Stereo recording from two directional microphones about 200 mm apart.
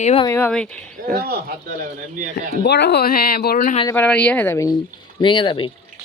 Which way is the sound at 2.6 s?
60° left (ahead or behind).